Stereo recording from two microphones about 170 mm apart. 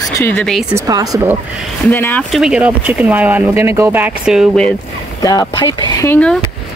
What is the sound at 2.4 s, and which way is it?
Speech, 5° right (ahead or behind).